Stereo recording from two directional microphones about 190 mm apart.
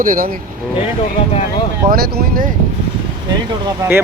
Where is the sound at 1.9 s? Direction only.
50° right (ahead or behind).